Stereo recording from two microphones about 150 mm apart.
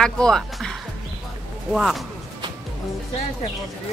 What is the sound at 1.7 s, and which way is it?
Speech, centre (ahead or behind).